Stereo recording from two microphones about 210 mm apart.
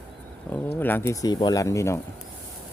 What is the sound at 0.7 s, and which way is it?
Speech, 10° left (ahead or behind).